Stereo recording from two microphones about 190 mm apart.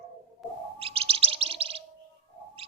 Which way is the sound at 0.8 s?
30° right (ahead or behind).